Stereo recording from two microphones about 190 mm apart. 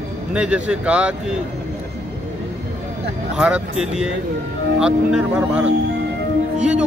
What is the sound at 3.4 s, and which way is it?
Speech, 5° right (ahead or behind).